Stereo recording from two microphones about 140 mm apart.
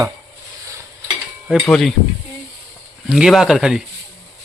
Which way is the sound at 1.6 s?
5° left (ahead or behind).